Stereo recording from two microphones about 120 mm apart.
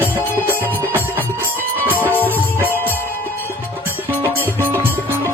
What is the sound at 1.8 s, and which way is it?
Music, 15° right (ahead or behind).